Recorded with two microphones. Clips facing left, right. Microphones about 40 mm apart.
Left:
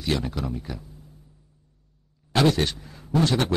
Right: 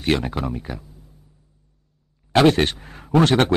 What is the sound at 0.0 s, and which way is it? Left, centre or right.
Speech, right.